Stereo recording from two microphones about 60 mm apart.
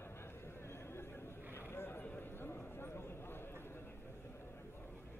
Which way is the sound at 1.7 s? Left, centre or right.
Left.